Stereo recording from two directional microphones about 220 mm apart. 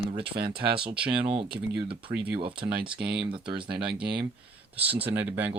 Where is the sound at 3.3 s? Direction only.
20° right (ahead or behind).